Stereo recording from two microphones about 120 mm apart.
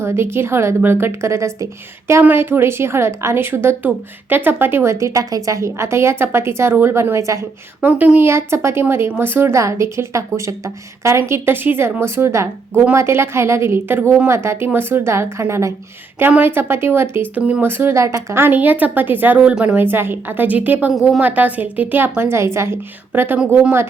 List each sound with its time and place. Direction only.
0.0 s a woman's voice: 20° right (ahead or behind)
7.8 s a woman's voice: 15° right (ahead or behind)